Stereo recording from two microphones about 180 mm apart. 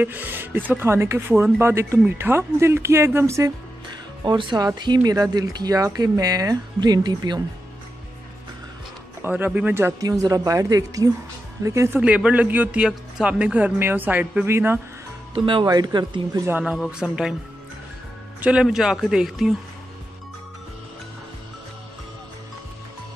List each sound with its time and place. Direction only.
0.0 s speech: 10° right (ahead or behind)
9.2 s speech: 10° right (ahead or behind)
15.3 s speech: 25° right (ahead or behind)
16.4 s speech: 5° right (ahead or behind)
18.4 s speech: 5° right (ahead or behind)